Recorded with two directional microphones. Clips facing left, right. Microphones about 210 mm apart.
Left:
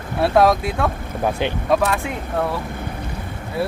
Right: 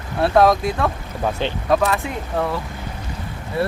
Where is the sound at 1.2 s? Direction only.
15° left (ahead or behind).